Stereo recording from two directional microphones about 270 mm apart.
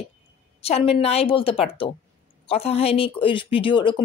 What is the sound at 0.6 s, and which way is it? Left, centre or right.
A woman's voice, left.